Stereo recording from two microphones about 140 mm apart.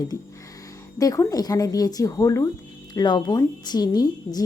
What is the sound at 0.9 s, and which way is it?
A woman's voice, 25° left (ahead or behind).